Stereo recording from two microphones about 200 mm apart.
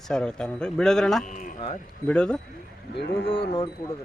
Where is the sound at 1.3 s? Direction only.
40° left (ahead or behind).